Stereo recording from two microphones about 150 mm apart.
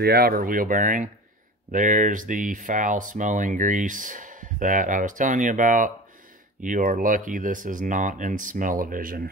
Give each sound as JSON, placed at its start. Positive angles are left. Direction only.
{"t": 0.0, "sound": "speech", "side_deg": -90}